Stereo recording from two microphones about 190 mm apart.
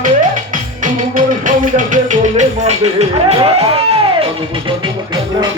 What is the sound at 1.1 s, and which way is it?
Music, 45° right (ahead or behind).